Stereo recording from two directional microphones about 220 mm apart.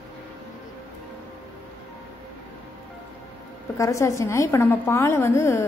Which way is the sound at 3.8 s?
15° left (ahead or behind).